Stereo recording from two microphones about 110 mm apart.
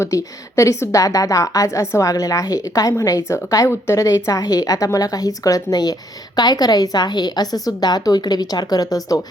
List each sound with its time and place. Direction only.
0.0 s a woman's voice: 30° left (ahead or behind)